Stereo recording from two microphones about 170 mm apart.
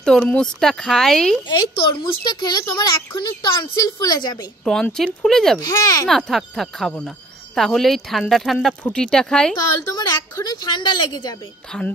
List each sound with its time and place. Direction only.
0.0 s speech: 5° left (ahead or behind)
2.2 s a woman's voice: 25° left (ahead or behind)
4.6 s speech: 5° left (ahead or behind)
5.6 s a woman's voice: 20° left (ahead or behind)
6.0 s speech: centre (ahead or behind)
9.9 s a woman's voice: 25° left (ahead or behind)
11.7 s speech: 5° left (ahead or behind)